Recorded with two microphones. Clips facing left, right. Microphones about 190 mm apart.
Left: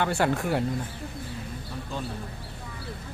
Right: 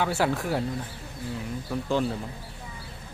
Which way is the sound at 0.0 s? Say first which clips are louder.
Left 1 dB; 5° right (ahead or behind).